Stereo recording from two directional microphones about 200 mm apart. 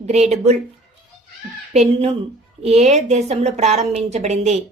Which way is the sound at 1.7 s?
30° right (ahead or behind).